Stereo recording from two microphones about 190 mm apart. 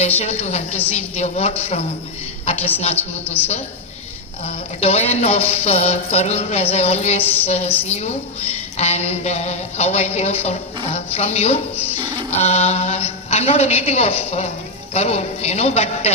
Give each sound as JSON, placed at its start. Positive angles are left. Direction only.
{"t": 0.2, "sound": "a woman's voice", "side_deg": 35}
{"t": 3.0, "sound": "a woman's voice", "side_deg": 10}
{"t": 4.4, "sound": "speech", "side_deg": 35}
{"t": 7.2, "sound": "a woman's voice", "side_deg": 10}
{"t": 7.4, "sound": "speech", "side_deg": 35}
{"t": 11.8, "sound": "music", "side_deg": 10}
{"t": 12.0, "sound": "speech", "side_deg": 35}